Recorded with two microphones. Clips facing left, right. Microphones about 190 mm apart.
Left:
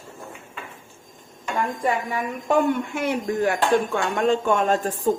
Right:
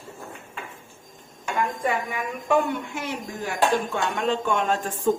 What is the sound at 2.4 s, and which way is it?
Speech, 50° left (ahead or behind).